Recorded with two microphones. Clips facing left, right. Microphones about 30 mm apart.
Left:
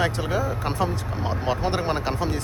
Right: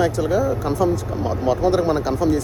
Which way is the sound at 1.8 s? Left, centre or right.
Left.